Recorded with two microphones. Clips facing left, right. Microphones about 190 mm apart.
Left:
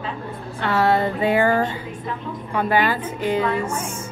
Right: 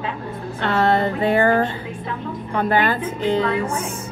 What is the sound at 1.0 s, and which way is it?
Speech, 15° left (ahead or behind).